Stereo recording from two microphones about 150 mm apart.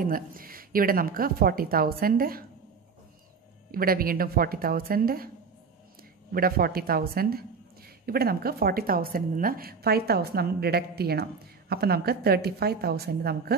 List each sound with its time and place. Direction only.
0.0 s speech: 70° right (ahead or behind)
3.7 s speech: 80° right
6.3 s a woman's voice: 80° right